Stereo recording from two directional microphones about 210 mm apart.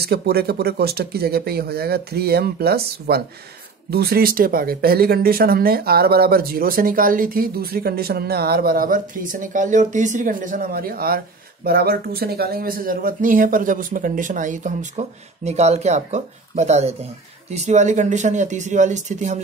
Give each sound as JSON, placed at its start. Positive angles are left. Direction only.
{"t": 0.0, "sound": "speech", "side_deg": -50}